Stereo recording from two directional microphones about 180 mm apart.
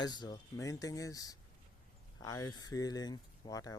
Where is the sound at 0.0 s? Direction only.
25° left (ahead or behind).